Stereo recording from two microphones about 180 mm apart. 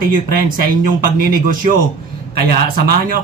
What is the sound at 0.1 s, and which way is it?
A man's voice, 50° right (ahead or behind).